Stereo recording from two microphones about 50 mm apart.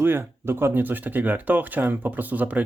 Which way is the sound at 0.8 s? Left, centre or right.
Right.